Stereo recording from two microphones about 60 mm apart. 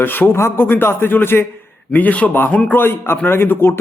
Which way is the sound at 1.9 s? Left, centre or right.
Left.